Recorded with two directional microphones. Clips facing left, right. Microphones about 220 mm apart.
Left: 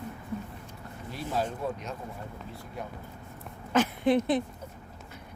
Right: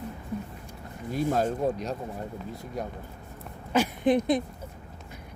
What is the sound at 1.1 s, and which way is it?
Speech, 45° right (ahead or behind).